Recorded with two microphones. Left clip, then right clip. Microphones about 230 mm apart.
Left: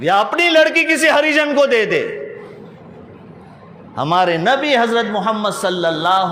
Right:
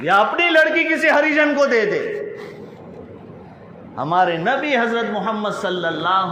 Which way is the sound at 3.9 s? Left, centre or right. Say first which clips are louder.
Left 2 dB; left.